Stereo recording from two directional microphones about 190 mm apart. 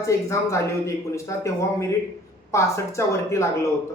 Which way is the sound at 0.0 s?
15° left (ahead or behind).